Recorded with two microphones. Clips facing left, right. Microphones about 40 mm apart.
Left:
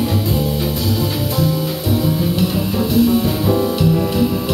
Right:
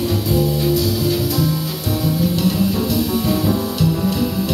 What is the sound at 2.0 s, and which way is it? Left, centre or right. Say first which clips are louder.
Music: right 3 dB; left.